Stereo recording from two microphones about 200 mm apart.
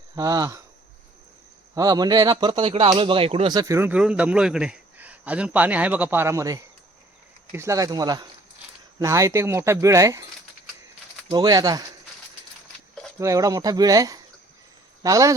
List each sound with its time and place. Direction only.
0.2 s speech: 15° right (ahead or behind)
1.7 s speech: 20° right (ahead or behind)
11.3 s speech: 20° right (ahead or behind)
13.1 s speech: 15° right (ahead or behind)